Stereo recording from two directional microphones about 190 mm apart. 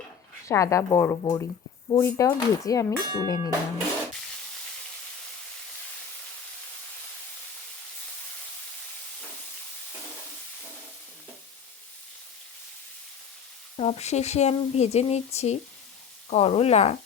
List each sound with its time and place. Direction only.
0.4 s speech: 15° left (ahead or behind)
13.7 s speech: 30° left (ahead or behind)